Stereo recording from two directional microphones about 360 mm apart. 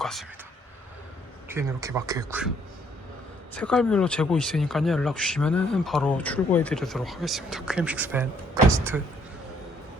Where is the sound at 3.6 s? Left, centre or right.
Centre.